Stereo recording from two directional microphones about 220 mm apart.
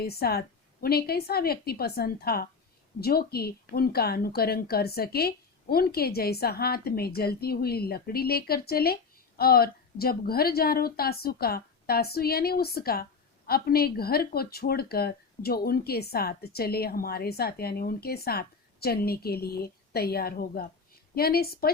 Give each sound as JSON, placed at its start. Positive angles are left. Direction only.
{"t": 0.0, "sound": "speech", "side_deg": 45}